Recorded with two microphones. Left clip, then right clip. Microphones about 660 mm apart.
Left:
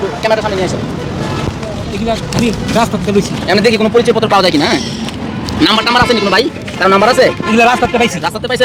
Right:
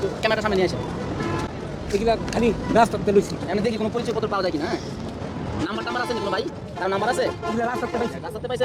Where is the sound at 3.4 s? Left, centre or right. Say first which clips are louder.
Left 14 dB; left.